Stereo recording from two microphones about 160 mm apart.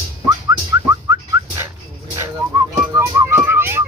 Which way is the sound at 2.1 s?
20° right (ahead or behind).